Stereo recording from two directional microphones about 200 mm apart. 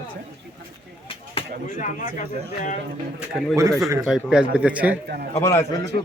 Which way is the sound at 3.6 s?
15° right (ahead or behind).